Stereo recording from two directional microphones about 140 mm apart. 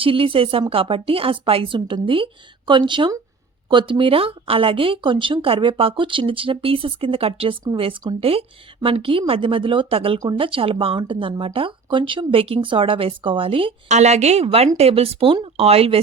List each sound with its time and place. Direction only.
0.0 s speech: 40° right (ahead or behind)
13.8 s speech: 55° right (ahead or behind)